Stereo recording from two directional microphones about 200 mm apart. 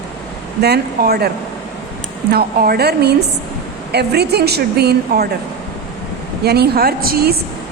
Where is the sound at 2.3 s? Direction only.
50° right (ahead or behind).